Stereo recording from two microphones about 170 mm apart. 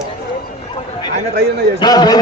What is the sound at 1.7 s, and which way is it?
Speech, 25° left (ahead or behind).